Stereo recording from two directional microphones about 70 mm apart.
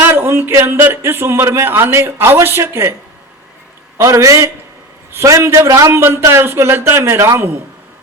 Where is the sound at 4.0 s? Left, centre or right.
Right.